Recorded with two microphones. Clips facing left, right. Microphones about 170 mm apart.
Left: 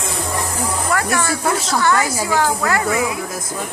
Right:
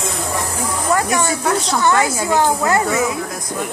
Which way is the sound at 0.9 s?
20° right (ahead or behind).